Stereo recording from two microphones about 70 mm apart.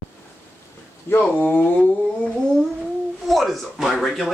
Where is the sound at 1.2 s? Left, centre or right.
Left.